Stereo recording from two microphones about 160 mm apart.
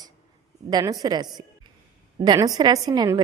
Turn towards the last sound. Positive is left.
turn(degrees=-25)  # may be behind; listen again after turning